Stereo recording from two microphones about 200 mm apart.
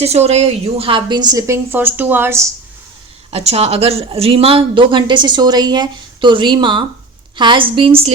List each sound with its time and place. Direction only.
0.0 s speech: 30° right (ahead or behind); by 2.5 s 10° right (ahead or behind)
3.3 s speech: 30° right (ahead or behind)